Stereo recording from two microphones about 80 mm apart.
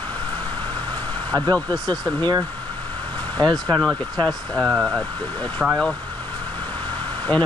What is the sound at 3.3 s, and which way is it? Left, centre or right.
Speech, centre.